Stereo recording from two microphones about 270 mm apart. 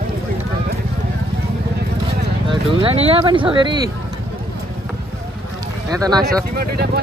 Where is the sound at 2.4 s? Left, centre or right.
Right.